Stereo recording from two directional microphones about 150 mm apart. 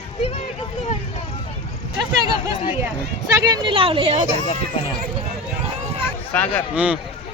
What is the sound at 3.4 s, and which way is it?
Speech, 30° right (ahead or behind).